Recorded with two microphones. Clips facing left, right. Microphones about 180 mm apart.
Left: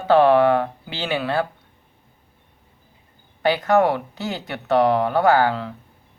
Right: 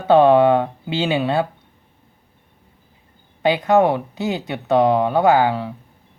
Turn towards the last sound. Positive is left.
turn(degrees=-15)  # may be behind; listen again after turning